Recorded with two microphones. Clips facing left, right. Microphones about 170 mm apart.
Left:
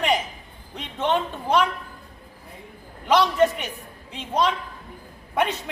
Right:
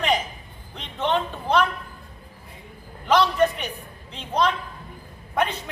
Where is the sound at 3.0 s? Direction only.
15° left (ahead or behind).